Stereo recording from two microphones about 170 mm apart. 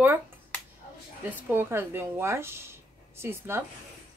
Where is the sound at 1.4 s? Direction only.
15° right (ahead or behind).